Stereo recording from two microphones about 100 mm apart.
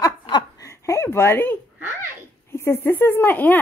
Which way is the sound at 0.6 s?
30° left (ahead or behind).